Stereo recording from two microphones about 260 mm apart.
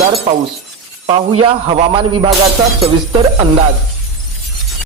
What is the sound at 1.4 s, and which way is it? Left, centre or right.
Speech, right.